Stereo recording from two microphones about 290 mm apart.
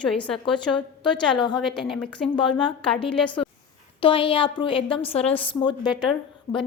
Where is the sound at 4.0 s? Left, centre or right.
Centre.